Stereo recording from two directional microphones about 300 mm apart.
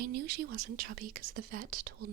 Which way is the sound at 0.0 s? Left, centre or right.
Right.